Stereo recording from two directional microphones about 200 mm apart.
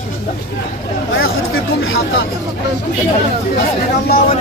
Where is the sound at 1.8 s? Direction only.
85° left.